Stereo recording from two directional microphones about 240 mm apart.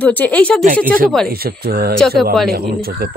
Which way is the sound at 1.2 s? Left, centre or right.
Right.